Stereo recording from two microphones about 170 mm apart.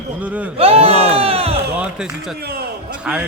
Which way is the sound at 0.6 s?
35° right (ahead or behind).